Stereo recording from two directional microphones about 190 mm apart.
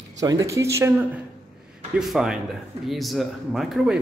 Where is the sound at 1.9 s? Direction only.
Centre (ahead or behind).